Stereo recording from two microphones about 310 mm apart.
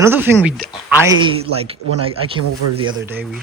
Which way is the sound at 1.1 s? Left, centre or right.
Centre.